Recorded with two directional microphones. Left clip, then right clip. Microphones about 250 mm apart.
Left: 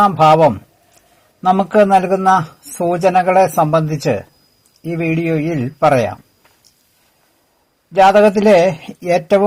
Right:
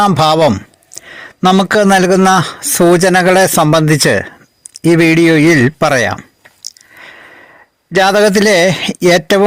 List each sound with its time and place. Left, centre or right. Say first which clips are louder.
0.0 s speech: even; right
8.0 s speech: even; right